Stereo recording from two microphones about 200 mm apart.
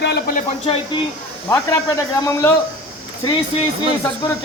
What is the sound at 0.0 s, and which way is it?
Speech, 50° left (ahead or behind).